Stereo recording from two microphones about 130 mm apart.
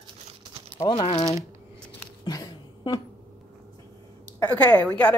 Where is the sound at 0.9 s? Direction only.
45° left (ahead or behind).